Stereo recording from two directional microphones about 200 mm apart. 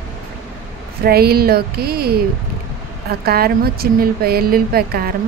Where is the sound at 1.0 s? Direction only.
50° right (ahead or behind).